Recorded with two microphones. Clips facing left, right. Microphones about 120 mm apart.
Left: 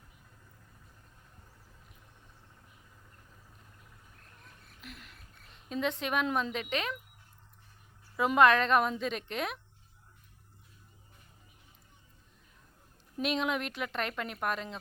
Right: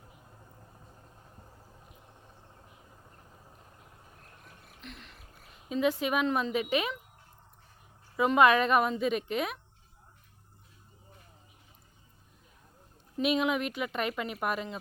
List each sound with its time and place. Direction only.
0.3 s vehicle: 35° right (ahead or behind)
4.8 s a woman's voice: 5° left (ahead or behind)
8.1 s a woman's voice: centre (ahead or behind)
13.2 s a woman's voice: 5° right (ahead or behind)